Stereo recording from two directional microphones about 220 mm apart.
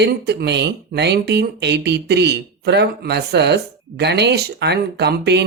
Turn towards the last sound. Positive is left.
turn(degrees=-50)  # may be behind; listen again after turning